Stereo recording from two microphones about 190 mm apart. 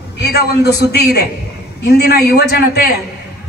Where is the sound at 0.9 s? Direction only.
60° left (ahead or behind).